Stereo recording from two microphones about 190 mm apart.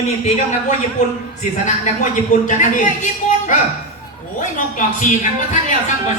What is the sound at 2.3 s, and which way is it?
Speech, 40° left (ahead or behind).